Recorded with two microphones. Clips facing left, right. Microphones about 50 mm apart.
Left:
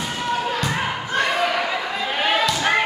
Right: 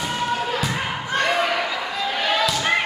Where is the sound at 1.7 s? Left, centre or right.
Left.